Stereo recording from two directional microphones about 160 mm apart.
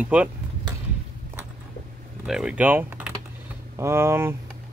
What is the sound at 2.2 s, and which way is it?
Speech, 5° right (ahead or behind).